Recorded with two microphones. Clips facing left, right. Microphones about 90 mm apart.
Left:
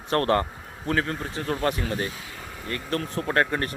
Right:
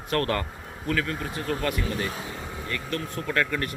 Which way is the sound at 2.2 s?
20° right (ahead or behind).